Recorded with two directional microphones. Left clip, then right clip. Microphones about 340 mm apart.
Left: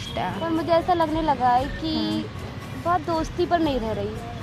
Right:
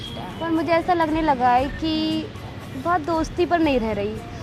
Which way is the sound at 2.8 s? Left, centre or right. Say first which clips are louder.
Right 2 dB; right.